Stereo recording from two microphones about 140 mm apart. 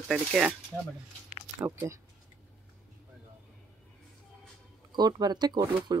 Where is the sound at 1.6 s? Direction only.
20° right (ahead or behind).